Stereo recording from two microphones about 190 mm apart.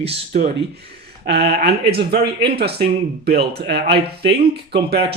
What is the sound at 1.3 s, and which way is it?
Speech, 60° right (ahead or behind).